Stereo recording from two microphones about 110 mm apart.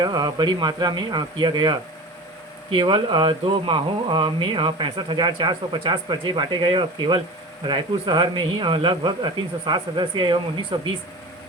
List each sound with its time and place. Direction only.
0.0 s speech: 35° right (ahead or behind)